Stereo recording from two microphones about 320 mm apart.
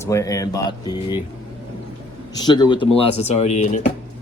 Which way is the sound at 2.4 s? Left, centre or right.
Centre.